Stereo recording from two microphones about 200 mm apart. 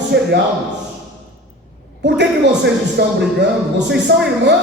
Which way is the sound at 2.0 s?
60° right (ahead or behind).